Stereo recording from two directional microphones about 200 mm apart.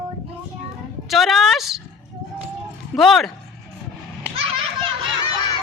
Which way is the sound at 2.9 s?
Centre (ahead or behind).